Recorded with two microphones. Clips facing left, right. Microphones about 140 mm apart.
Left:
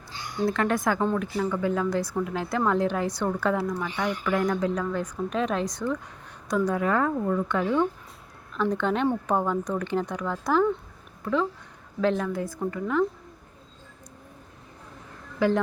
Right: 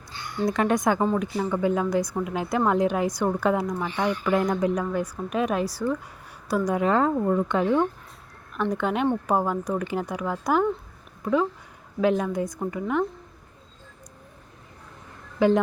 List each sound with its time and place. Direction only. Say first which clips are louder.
0.4 s a woman's voice: right 2 dB; 15° right (ahead or behind)
15.4 s a woman's voice: right 3 dB; 20° right (ahead or behind)